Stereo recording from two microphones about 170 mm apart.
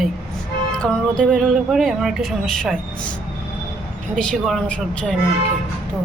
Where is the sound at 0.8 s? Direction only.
5° left (ahead or behind).